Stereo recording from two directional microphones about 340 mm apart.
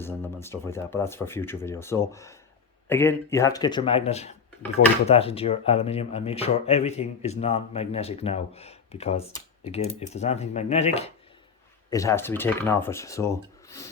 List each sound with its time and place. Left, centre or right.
0.0 s speech: centre